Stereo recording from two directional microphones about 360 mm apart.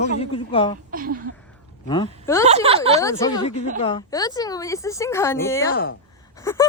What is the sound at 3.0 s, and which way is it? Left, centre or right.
A woman's voice, centre.